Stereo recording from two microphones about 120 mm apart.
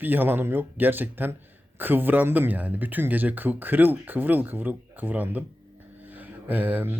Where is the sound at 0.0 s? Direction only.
15° right (ahead or behind).